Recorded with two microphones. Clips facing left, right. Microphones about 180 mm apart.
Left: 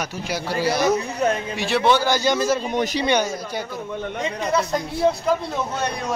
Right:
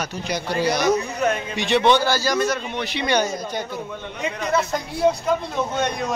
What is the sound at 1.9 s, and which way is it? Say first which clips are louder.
Speech: left 2 dB; 15° left (ahead or behind).